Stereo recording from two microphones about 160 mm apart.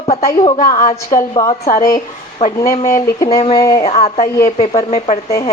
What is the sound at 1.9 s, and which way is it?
Speech, 40° left (ahead or behind).